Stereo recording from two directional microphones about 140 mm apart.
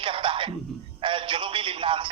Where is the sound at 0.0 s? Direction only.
40° right (ahead or behind).